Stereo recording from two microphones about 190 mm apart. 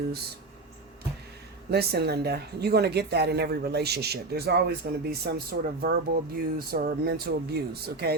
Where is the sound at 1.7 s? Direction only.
55° right (ahead or behind).